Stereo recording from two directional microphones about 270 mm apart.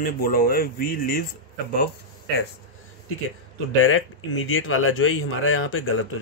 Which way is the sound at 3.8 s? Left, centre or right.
Left.